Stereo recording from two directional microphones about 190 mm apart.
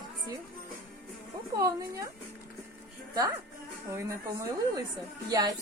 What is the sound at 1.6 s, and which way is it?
Speech, 15° right (ahead or behind).